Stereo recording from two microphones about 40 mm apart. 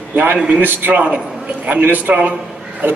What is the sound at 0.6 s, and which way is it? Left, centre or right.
A man's voice, right.